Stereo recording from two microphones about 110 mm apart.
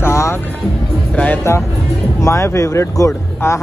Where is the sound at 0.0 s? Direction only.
25° left (ahead or behind).